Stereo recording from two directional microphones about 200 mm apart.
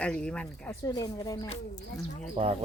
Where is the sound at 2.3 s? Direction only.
30° right (ahead or behind).